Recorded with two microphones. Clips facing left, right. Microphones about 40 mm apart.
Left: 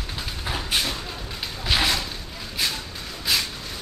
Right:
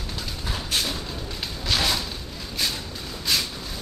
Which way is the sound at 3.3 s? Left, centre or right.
Centre.